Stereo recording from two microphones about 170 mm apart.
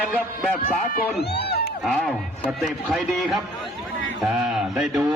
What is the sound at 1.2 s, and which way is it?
Run, 75° left (ahead or behind).